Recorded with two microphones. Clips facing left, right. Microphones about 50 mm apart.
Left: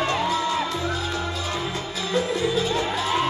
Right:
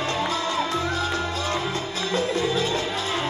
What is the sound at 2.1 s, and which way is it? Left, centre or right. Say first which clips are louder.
Music: left 1 dB; right.